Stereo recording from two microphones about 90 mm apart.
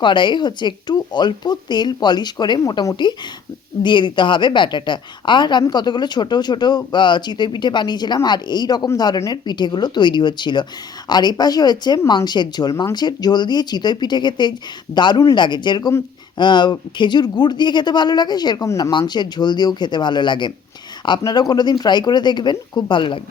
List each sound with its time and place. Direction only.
0.0 s speech: 60° left (ahead or behind)